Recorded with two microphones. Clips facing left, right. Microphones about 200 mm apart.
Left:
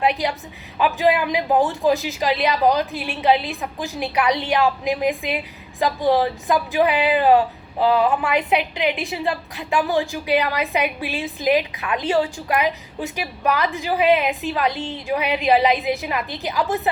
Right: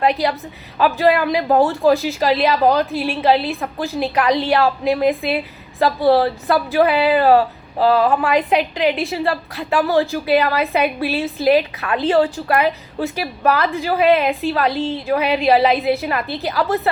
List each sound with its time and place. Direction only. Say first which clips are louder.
0.0 s a woman's voice: right 3 dB; 15° left (ahead or behind)